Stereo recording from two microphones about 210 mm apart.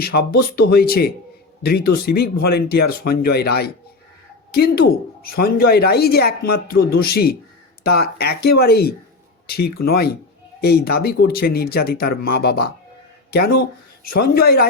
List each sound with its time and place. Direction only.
0.0 s speech: 50° left (ahead or behind)